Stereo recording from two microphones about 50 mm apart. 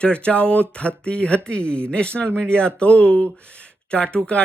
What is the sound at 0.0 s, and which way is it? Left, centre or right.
Speech, left.